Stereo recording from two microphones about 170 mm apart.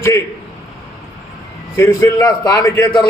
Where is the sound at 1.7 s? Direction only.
15° left (ahead or behind).